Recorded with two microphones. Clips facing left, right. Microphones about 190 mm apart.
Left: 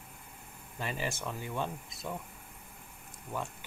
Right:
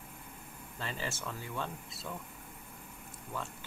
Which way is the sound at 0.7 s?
15° left (ahead or behind).